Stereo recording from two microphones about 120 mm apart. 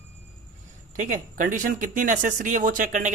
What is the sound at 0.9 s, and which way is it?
Speech, 90° right.